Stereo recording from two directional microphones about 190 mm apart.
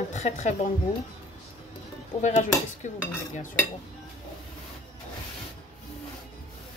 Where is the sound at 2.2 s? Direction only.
40° left (ahead or behind).